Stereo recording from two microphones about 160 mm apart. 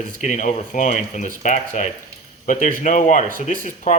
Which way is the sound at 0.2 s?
55° left (ahead or behind).